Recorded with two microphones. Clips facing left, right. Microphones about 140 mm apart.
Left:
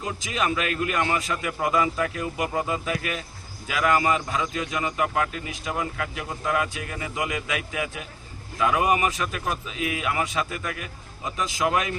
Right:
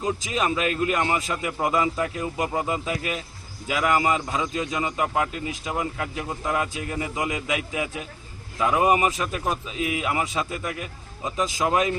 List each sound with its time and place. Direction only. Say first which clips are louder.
0.0 s a man's voice: right 2 dB; 25° right (ahead or behind)